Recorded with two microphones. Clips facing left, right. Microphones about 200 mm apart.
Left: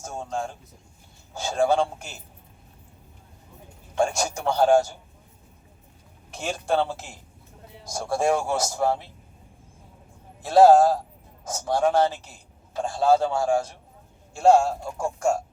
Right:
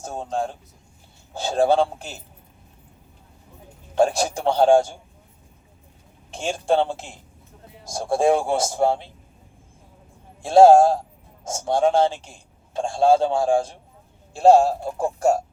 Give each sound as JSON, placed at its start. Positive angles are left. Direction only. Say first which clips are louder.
{"t": 0.0, "sound": "speech", "louder": "right 4 dB", "side_deg": -30}
{"t": 3.9, "sound": "a man's voice", "louder": "right 5 dB", "side_deg": -35}
{"t": 6.3, "sound": "a man's voice", "louder": "right 4 dB", "side_deg": -30}
{"t": 8.1, "sound": "a man's voice", "louder": "right 4 dB", "side_deg": -30}
{"t": 10.4, "sound": "a man's voice", "louder": "right 3 dB", "side_deg": -25}